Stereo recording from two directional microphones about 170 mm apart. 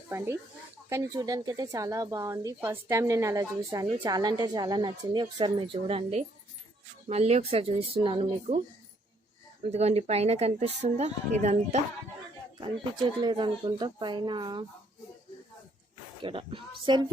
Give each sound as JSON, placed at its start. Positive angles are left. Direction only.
{"t": 0.1, "sound": "speech", "side_deg": -15}
{"t": 9.6, "sound": "speech", "side_deg": -40}
{"t": 12.5, "sound": "speech", "side_deg": -25}
{"t": 16.2, "sound": "speech", "side_deg": -30}